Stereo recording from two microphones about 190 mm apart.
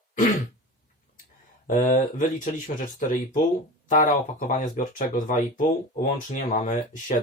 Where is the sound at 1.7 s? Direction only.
45° left (ahead or behind).